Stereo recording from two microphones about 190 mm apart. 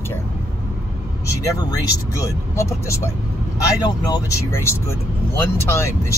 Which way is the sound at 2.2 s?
15° left (ahead or behind).